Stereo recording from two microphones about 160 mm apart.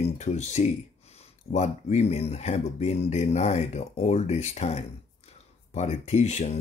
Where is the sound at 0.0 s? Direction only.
45° left (ahead or behind).